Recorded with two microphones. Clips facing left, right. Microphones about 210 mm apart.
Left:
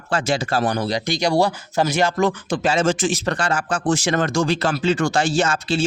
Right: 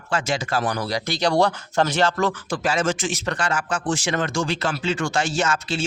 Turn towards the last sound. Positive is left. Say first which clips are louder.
# left 4 dB
turn(degrees=30)  # may be behind; listen again after turning